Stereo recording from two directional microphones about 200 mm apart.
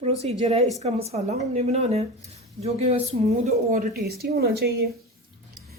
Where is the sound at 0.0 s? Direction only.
30° right (ahead or behind); by 4.9 s 55° right (ahead or behind).